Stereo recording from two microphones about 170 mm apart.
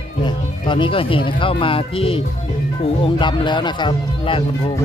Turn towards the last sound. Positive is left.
turn(degrees=30)  # may be behind; listen again after turning